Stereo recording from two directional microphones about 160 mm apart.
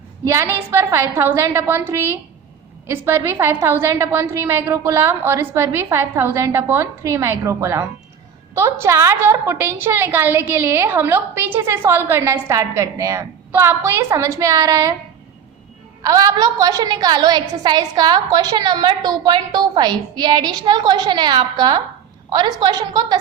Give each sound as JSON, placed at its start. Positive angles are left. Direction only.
{"t": 0.7, "sound": "a woman's voice", "side_deg": -15}
{"t": 3.1, "sound": "a woman's voice", "side_deg": -15}
{"t": 16.0, "sound": "a woman's voice", "side_deg": -25}